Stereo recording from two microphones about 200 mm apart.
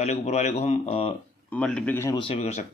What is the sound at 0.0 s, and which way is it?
Speech, 35° left (ahead or behind).